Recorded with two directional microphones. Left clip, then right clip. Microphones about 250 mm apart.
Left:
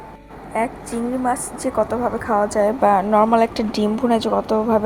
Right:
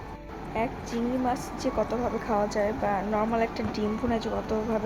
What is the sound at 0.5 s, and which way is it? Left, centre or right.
A woman's voice, centre.